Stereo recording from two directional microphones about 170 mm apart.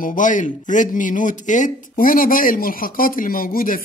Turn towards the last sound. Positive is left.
turn(degrees=55)  # may be behind; listen again after turning